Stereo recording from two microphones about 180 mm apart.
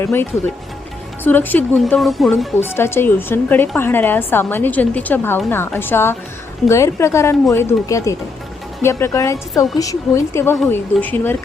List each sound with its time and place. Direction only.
0.0 s a woman's voice: 10° left (ahead or behind)
2.7 s a woman's voice: 15° left (ahead or behind)